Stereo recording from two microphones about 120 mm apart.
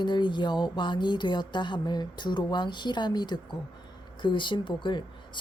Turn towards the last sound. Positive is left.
turn(degrees=40)  # may be behind; listen again after turning